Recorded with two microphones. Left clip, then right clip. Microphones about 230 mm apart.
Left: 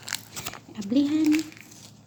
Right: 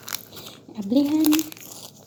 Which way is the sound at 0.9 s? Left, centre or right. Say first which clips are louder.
Right 3 dB; centre.